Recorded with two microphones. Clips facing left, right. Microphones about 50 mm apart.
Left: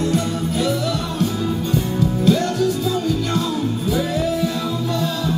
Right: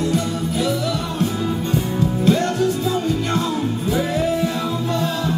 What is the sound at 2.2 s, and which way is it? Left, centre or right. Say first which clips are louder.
Music: even; right.